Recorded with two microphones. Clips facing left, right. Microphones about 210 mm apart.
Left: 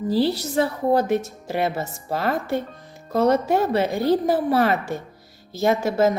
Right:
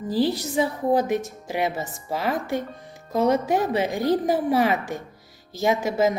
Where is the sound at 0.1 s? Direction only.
15° right (ahead or behind).